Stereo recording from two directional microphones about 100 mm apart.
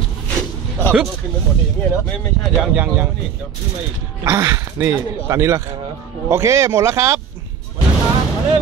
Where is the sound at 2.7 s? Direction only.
15° right (ahead or behind).